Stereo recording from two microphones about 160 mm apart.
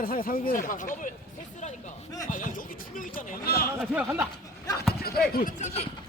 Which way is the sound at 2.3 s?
55° left (ahead or behind).